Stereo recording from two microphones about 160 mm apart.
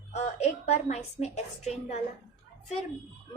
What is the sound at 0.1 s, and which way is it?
A woman's voice, 45° left (ahead or behind).